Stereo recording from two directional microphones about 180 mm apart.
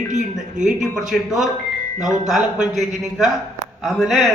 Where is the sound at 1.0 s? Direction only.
Centre (ahead or behind).